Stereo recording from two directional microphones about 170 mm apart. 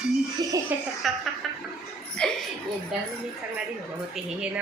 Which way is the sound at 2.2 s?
5° left (ahead or behind).